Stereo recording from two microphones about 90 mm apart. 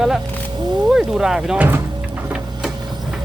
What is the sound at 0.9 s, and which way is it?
Speech, 5° right (ahead or behind).